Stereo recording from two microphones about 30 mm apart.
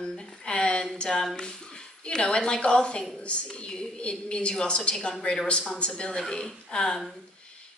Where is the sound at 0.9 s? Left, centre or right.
Left.